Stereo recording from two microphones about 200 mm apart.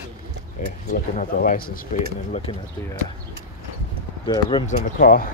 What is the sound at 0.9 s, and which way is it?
Speech, 45° left (ahead or behind).